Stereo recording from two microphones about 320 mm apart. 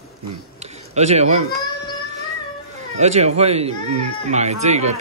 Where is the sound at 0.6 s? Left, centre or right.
Right.